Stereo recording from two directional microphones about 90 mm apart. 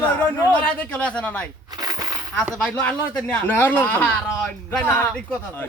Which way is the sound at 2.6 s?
15° left (ahead or behind).